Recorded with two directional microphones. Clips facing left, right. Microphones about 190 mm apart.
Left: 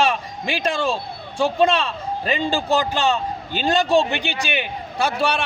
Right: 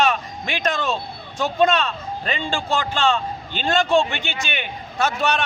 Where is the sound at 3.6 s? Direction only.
35° left (ahead or behind).